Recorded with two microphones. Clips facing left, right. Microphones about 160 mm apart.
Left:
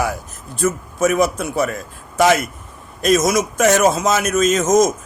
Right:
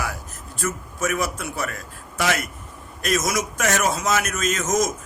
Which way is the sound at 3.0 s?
20° left (ahead or behind).